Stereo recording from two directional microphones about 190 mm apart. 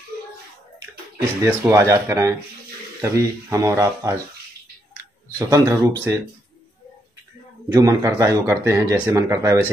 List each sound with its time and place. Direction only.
1.1 s speech: 15° right (ahead or behind)
5.5 s speech: 20° right (ahead or behind)
7.7 s speech: 15° right (ahead or behind)